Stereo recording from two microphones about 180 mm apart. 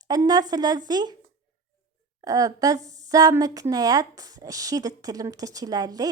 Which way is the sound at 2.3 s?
20° right (ahead or behind).